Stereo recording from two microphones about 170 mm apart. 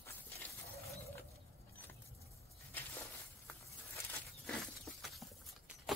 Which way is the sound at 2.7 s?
10° left (ahead or behind).